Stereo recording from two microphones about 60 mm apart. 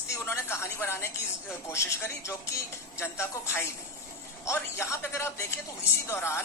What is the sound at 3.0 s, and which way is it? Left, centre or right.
A woman's voice, left.